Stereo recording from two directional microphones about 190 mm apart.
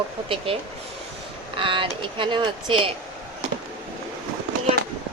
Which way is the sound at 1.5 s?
25° right (ahead or behind).